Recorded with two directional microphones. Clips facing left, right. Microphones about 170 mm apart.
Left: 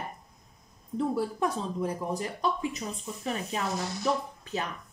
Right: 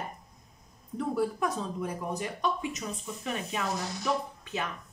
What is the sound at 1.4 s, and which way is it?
A woman's voice, 30° left (ahead or behind).